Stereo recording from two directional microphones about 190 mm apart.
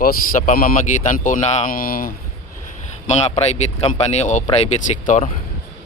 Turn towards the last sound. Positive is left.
turn(degrees=35)  # may be behind; listen again after turning